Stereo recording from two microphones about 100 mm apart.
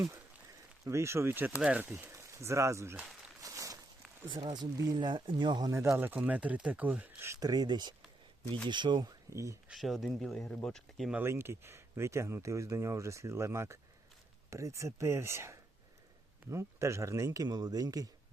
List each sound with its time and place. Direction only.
0.9 s speech: 25° right (ahead or behind)
2.4 s speech: 30° right (ahead or behind)
3.4 s a sound: 35° right (ahead or behind)
4.3 s speech: 70° right (ahead or behind)
4.5 s speech: 40° right (ahead or behind)
4.9 s speech: 55° right (ahead or behind)
5.8 s speech: 25° right (ahead or behind)
7.3 s speech: 40° right (ahead or behind)
9.3 s speech: 30° right (ahead or behind)
9.6 s speech: centre (ahead or behind)
11.2 s speech: 25° right (ahead or behind)